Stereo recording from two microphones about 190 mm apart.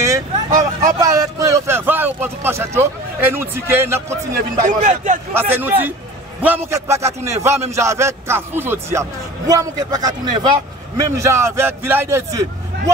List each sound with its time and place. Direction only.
0.0 s vehicle: 15° right (ahead or behind)
0.9 s a sound: 20° right (ahead or behind)
4.6 s speech: 40° right (ahead or behind)
5.3 s a man's voice: 10° right (ahead or behind)